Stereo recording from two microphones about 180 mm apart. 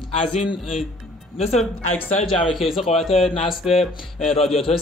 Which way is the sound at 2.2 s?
30° left (ahead or behind).